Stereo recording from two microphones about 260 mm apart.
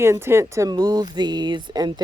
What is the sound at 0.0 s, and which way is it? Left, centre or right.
Speech, centre.